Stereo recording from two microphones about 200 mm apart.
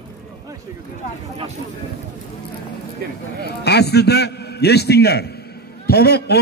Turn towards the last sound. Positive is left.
turn(degrees=55)  # may be behind; listen again after turning